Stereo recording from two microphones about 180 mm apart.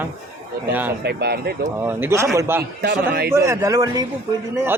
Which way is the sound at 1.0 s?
65° right (ahead or behind).